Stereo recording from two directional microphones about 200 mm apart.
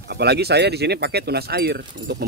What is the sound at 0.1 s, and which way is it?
Speech, 55° right (ahead or behind).